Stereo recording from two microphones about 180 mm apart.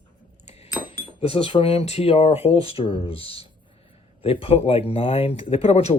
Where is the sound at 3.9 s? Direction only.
30° left (ahead or behind).